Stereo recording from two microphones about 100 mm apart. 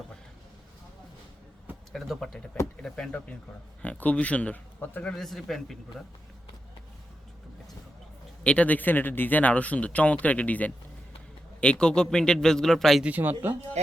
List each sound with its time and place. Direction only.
1.9 s speech: centre (ahead or behind)
5.1 s speech: 5° left (ahead or behind)
8.4 s speech: 15° left (ahead or behind)
13.1 s speech: 20° right (ahead or behind)